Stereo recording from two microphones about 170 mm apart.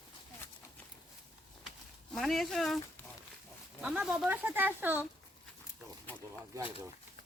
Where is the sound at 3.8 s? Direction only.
5° right (ahead or behind).